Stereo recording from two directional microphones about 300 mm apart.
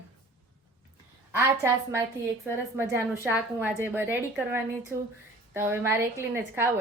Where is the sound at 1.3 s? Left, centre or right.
Centre.